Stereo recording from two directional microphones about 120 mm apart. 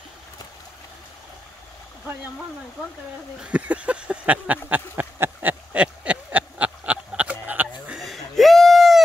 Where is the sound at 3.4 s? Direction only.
10° right (ahead or behind).